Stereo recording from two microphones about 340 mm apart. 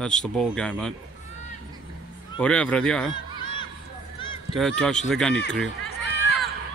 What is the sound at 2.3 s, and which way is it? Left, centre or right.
Speech, centre.